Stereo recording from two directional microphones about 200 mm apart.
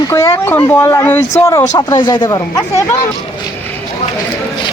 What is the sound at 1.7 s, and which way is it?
Speech, 20° left (ahead or behind).